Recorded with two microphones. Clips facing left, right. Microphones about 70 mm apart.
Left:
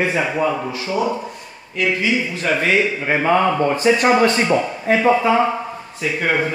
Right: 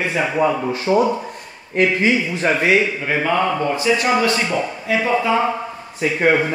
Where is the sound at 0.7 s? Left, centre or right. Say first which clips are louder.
Right 4 dB; right.